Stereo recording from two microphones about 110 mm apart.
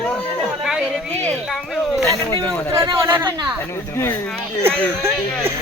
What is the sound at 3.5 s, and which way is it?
Speech, 20° left (ahead or behind).